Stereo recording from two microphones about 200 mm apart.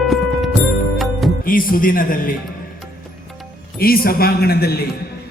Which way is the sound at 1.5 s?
45° left (ahead or behind).